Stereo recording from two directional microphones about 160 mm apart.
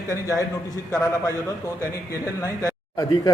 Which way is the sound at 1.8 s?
20° left (ahead or behind).